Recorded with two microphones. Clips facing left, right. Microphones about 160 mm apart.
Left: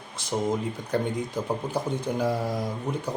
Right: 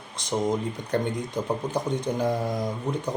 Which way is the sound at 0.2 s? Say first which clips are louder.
Right 2 dB; 5° left (ahead or behind).